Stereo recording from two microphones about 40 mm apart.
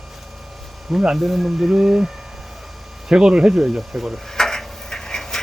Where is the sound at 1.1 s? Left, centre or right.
Centre.